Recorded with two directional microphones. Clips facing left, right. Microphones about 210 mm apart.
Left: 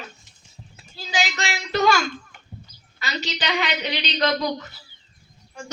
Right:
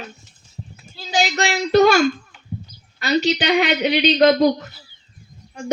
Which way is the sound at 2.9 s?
55° right (ahead or behind).